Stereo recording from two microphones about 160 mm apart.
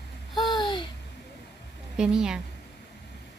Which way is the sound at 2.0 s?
5° right (ahead or behind).